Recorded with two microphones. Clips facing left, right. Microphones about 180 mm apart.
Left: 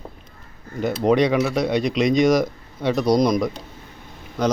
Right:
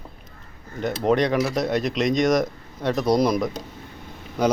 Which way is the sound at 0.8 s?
5° left (ahead or behind).